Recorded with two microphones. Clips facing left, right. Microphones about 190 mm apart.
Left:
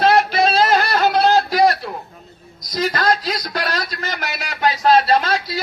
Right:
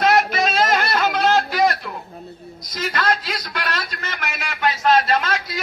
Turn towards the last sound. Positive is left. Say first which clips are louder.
# left 4 dB
turn(degrees=35)  # may be behind; listen again after turning